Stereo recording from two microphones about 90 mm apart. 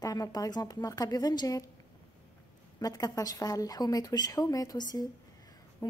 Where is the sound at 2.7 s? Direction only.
45° left (ahead or behind).